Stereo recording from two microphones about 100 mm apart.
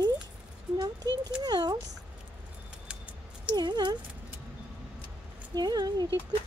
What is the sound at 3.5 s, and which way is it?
Speech, 45° right (ahead or behind).